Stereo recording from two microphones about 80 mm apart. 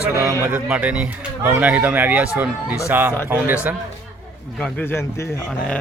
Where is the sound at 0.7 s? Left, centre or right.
Centre.